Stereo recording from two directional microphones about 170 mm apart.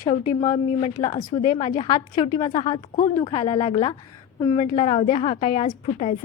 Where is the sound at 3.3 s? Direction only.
40° left (ahead or behind).